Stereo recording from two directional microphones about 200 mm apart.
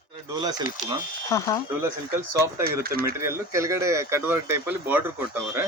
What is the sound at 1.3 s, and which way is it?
Speech, 15° left (ahead or behind).